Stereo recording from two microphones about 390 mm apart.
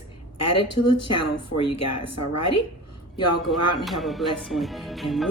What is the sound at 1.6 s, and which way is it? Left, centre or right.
Speech, left.